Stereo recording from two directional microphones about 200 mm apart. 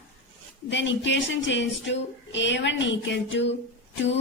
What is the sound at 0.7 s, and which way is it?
A woman's voice, 65° left (ahead or behind).